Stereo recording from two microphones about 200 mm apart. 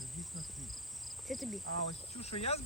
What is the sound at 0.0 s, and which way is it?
Insect, centre (ahead or behind).